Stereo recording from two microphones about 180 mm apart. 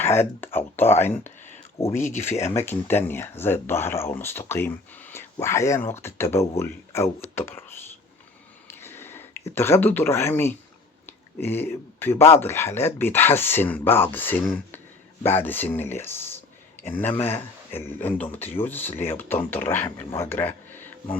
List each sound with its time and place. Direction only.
0.4 s speech: 10° left (ahead or behind)
2.1 s speech: 40° left (ahead or behind)
2.6 s speech: 10° left (ahead or behind)
8.6 s a sound: 10° left (ahead or behind)
9.6 s speech: 15° left (ahead or behind)
11.0 s a sound: 10° left (ahead or behind)
12.3 s speech: 15° left (ahead or behind)